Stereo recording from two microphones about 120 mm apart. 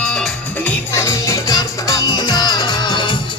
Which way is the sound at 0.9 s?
25° left (ahead or behind).